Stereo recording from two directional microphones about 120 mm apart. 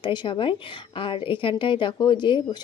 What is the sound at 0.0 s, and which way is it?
A woman's voice, 40° left (ahead or behind).